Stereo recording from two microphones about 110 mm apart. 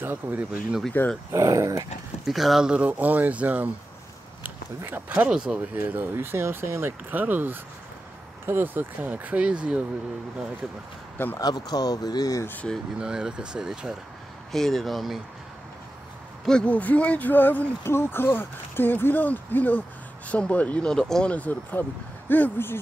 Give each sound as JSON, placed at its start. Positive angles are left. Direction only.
{"t": 0.0, "sound": "speech", "side_deg": -15}
{"t": 1.0, "sound": "speech", "side_deg": 15}
{"t": 1.3, "sound": "speech", "side_deg": -30}
{"t": 2.2, "sound": "speech", "side_deg": 0}
{"t": 5.8, "sound": "speech", "side_deg": -20}
{"t": 11.3, "sound": "speech", "side_deg": 35}
{"t": 13.0, "sound": "speech", "side_deg": -5}
{"t": 16.4, "sound": "speech", "side_deg": 10}